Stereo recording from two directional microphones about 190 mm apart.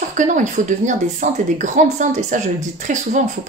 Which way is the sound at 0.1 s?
40° right (ahead or behind).